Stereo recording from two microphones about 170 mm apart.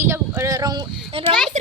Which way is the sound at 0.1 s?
15° right (ahead or behind).